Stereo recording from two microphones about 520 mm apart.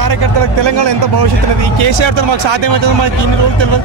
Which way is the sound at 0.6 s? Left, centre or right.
Right.